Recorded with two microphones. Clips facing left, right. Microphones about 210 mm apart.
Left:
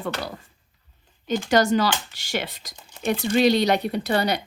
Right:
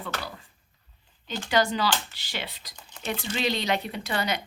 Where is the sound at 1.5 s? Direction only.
45° left (ahead or behind).